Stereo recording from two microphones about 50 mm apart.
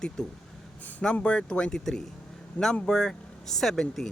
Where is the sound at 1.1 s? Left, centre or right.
Centre.